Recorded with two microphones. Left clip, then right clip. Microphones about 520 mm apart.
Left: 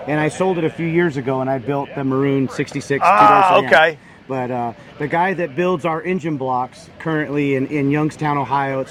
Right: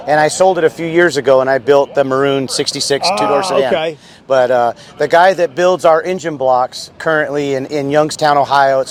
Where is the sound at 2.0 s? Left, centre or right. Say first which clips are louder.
Right 6 dB; right.